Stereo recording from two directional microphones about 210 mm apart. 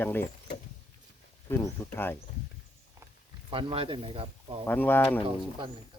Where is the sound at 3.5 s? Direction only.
25° right (ahead or behind).